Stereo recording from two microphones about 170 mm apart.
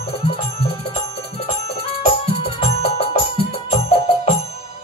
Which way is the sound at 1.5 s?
35° left (ahead or behind).